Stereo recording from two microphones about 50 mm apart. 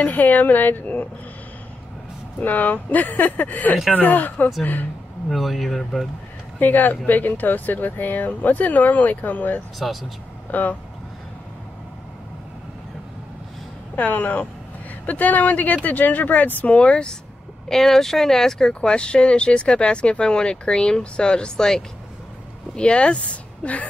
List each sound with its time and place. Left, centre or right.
0.0 s speech: left
2.4 s speech: left
5.3 s speech: centre
6.6 s speech: left
9.8 s speech: centre
10.5 s speech: left
13.9 s speech: left
16.7 s speech: left
17.6 s speech: centre; by 23.9 s left